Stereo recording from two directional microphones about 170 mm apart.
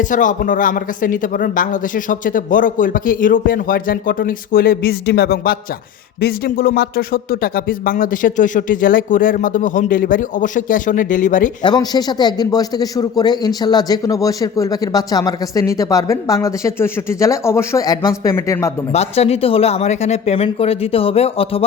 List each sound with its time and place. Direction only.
0.0 s speech: 50° left (ahead or behind)
11.6 s a man's voice: 25° left (ahead or behind)
18.9 s speech: 40° left (ahead or behind)